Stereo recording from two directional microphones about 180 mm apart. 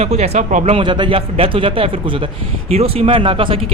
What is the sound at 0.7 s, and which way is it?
Speech, 25° right (ahead or behind).